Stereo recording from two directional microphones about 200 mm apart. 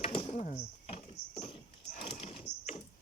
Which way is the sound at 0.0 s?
25° left (ahead or behind).